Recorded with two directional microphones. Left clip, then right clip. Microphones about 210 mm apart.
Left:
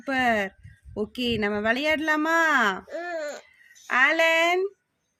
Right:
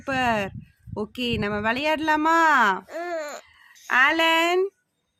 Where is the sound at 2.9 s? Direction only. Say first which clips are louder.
Right 1 dB; 35° right (ahead or behind).